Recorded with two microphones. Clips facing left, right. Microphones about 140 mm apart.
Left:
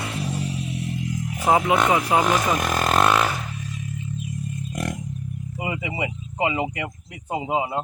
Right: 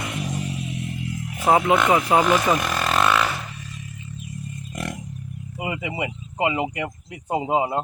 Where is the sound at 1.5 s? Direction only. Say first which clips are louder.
Right 1 dB; 5° right (ahead or behind).